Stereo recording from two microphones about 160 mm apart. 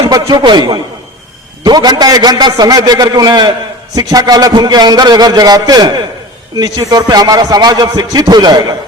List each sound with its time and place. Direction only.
0.1 s a man's voice: 25° right (ahead or behind)